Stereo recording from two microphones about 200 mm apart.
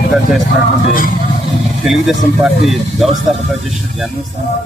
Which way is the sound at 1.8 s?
Centre (ahead or behind).